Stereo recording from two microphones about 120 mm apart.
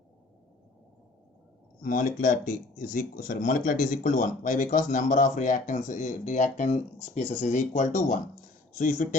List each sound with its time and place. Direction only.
2.0 s speech: 90° left; by 7.3 s 55° left (ahead or behind)
7.4 s speech: 85° left